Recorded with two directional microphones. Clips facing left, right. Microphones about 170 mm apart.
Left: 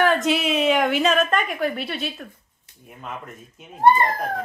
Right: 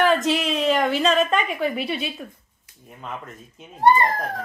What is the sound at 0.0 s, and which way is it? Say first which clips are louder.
A woman's voice: even; centre (ahead or behind).